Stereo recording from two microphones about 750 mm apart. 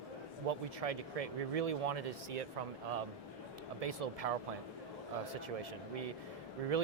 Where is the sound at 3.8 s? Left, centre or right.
Right.